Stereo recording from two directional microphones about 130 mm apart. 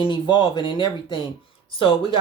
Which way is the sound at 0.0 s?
40° left (ahead or behind).